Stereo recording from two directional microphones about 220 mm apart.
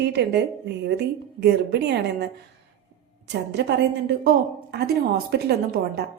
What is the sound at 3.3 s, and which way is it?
A woman's voice, 50° right (ahead or behind).